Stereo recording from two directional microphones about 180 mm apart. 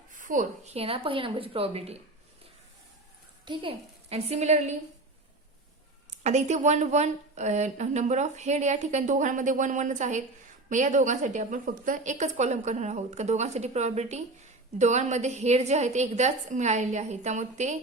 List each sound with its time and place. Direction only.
0.2 s a woman's voice: 45° right (ahead or behind)
3.4 s a woman's voice: 30° right (ahead or behind)
6.1 s a woman's voice: 40° right (ahead or behind)